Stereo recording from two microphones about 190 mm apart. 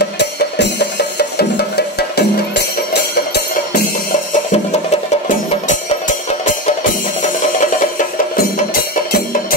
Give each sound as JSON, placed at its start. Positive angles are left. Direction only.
{"t": 0.0, "sound": "music", "side_deg": 65}
{"t": 5.3, "sound": "music", "side_deg": 45}